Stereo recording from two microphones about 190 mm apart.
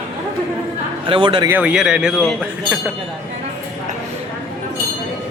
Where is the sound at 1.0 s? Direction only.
25° right (ahead or behind).